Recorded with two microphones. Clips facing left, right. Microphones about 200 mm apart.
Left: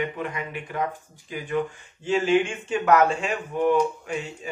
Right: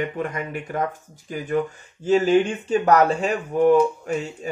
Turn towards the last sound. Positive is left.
turn(degrees=-40)  # may be behind; listen again after turning